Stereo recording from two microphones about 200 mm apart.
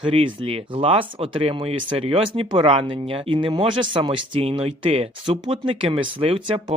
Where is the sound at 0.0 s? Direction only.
25° right (ahead or behind).